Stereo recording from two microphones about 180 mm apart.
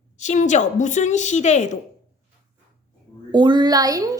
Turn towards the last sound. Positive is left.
turn(degrees=-20)  # may be behind; listen again after turning